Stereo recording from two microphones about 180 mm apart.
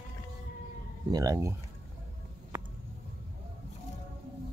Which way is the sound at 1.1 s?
20° right (ahead or behind).